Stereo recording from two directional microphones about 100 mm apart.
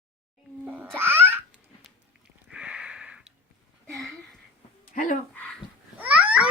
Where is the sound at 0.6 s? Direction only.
15° right (ahead or behind).